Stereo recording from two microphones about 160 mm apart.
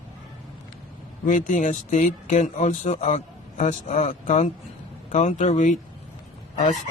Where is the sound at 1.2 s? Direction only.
50° left (ahead or behind).